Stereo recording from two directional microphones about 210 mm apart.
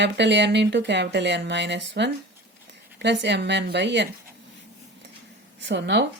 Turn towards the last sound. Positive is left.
turn(degrees=-55)  # may be behind; listen again after turning